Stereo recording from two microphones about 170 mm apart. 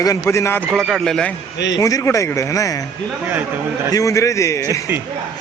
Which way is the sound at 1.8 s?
20° left (ahead or behind).